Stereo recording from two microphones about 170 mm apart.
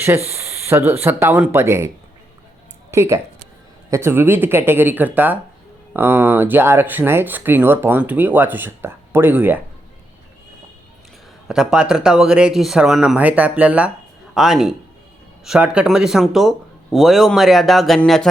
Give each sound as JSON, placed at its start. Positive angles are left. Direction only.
{"t": 0.3, "sound": "speech", "side_deg": -15}
{"t": 2.9, "sound": "speech", "side_deg": -15}
{"t": 11.4, "sound": "speech", "side_deg": -5}